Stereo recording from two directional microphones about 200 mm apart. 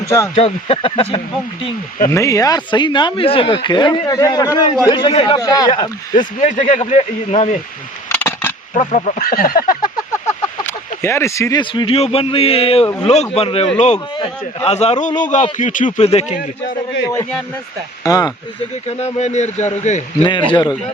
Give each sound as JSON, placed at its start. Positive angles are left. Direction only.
{"t": 0.0, "sound": "speech", "side_deg": 15}
{"t": 0.3, "sound": "speech", "side_deg": 25}
{"t": 2.0, "sound": "speech", "side_deg": 15}
{"t": 6.1, "sound": "a man's voice", "side_deg": 40}
{"t": 8.1, "sound": "a sound", "side_deg": 10}
{"t": 8.7, "sound": "a man's voice", "side_deg": 35}
{"t": 10.7, "sound": "a man's voice", "side_deg": 15}
{"t": 18.0, "sound": "speech", "side_deg": 20}
{"t": 18.9, "sound": "a man's voice", "side_deg": 30}
{"t": 20.5, "sound": "speech", "side_deg": 20}